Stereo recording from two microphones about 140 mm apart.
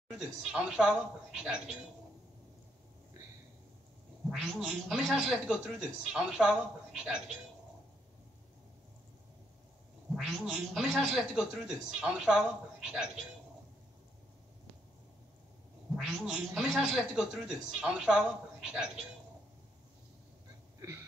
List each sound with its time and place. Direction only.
0.1 s speech: 5° right (ahead or behind)
4.3 s speech: centre (ahead or behind)
10.1 s speech: 5° right (ahead or behind)
16.0 s speech: 5° right (ahead or behind)